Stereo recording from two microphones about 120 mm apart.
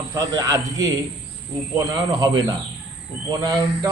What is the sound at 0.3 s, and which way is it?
Speech, 30° right (ahead or behind).